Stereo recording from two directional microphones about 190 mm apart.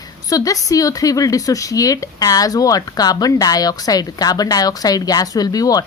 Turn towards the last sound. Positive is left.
turn(degrees=20)  # may be behind; listen again after turning